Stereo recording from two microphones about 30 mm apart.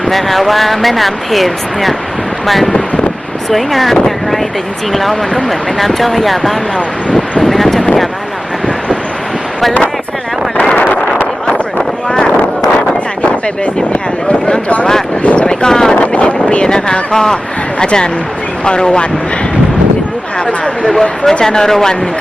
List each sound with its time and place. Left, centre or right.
0.0 s speech: centre
12.0 s a sound: left
13.9 s speech: left
15.4 s speech: left
16.0 s vehicle: left
16.6 s speech: left
17.7 s speech: left
20.8 s speech: centre